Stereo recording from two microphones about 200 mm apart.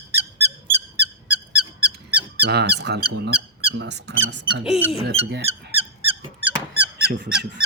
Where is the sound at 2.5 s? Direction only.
55° right (ahead or behind).